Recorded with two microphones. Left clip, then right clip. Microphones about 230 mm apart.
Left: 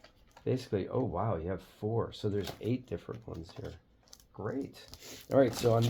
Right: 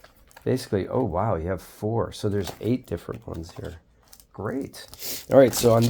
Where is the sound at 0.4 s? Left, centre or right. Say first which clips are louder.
Right 8 dB; right.